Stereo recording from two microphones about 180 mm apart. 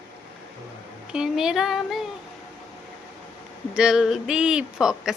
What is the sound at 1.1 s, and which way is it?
Speech, 5° right (ahead or behind).